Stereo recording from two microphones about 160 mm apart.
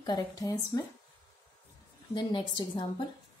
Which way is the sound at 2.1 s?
30° left (ahead or behind).